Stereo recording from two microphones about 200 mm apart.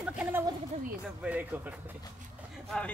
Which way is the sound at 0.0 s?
5° right (ahead or behind).